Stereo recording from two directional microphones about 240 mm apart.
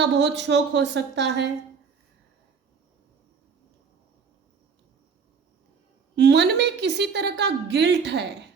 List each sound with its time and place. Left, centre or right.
0.0 s a woman's voice: right
6.1 s a woman's voice: right